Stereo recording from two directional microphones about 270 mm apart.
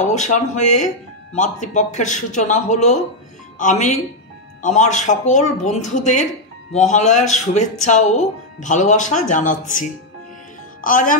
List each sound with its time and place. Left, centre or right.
0.0 s speech: left